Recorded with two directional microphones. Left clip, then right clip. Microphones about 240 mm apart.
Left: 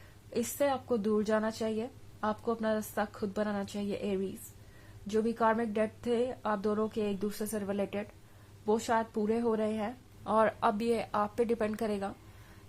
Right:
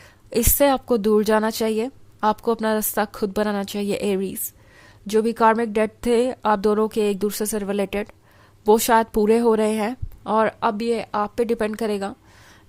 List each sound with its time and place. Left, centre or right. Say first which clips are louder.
0.3 s a woman's voice: right 12 dB; right
10.3 s a woman's voice: right 8 dB; right